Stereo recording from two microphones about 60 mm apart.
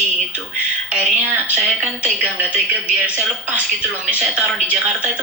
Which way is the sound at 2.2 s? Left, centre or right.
Right.